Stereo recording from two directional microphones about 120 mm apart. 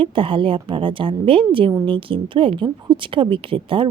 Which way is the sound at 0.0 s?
50° right (ahead or behind).